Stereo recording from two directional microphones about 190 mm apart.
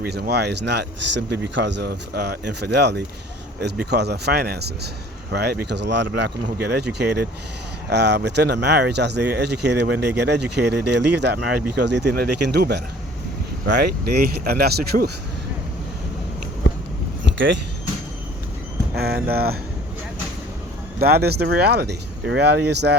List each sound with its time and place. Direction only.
0.0 s speech: 55° right (ahead or behind)
14.1 s speech: 55° right (ahead or behind)
17.3 s speech: 70° right (ahead or behind)
18.9 s speech: 55° right (ahead or behind)
21.0 s speech: 55° right (ahead or behind)